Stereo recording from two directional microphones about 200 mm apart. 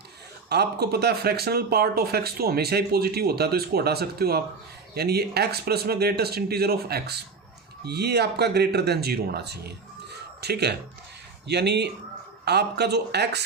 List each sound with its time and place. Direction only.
0.4 s speech: 55° right (ahead or behind)